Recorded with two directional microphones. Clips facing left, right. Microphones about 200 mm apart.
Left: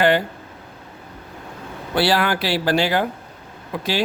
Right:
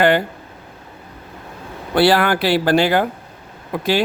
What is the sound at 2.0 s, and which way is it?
Speech, 55° right (ahead or behind).